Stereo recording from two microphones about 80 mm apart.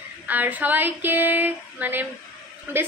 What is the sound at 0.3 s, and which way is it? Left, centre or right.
A woman's voice, right.